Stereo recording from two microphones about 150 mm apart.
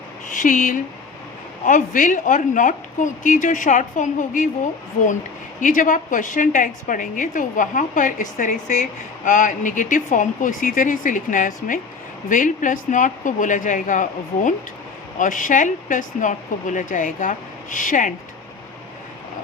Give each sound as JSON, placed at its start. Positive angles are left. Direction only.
{"t": 0.3, "sound": "a woman's voice", "side_deg": 60}
{"t": 5.5, "sound": "a woman's voice", "side_deg": 60}